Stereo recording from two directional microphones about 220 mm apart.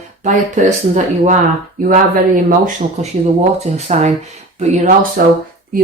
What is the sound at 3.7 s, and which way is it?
Speech, 30° right (ahead or behind).